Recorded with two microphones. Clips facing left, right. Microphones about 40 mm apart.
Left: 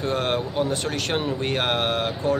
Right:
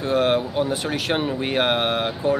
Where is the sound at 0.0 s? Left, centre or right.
Centre.